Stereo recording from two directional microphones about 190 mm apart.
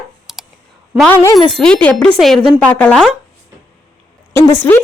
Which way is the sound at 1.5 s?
5° left (ahead or behind).